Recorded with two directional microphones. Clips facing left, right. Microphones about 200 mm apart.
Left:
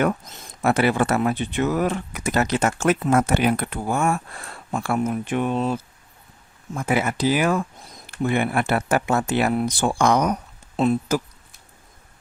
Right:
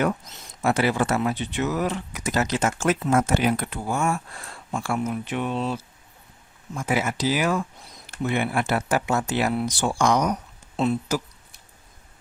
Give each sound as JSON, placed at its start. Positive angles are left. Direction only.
{"t": 0.0, "sound": "speech", "side_deg": 50}